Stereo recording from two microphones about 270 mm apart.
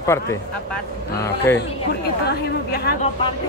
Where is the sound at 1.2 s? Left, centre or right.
Centre.